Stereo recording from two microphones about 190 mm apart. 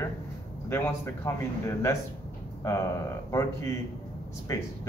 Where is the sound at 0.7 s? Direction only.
15° left (ahead or behind).